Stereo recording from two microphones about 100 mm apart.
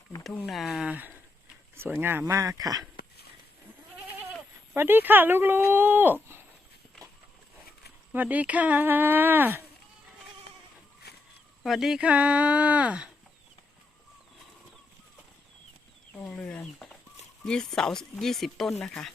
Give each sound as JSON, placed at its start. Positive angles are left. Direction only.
{"t": 0.4, "sound": "speech", "side_deg": 0}
{"t": 1.7, "sound": "speech", "side_deg": -20}
{"t": 4.7, "sound": "speech", "side_deg": -20}
{"t": 8.1, "sound": "speech", "side_deg": -15}
{"t": 11.6, "sound": "speech", "side_deg": -5}
{"t": 16.2, "sound": "chicken", "side_deg": 10}
{"t": 17.4, "sound": "speech", "side_deg": 5}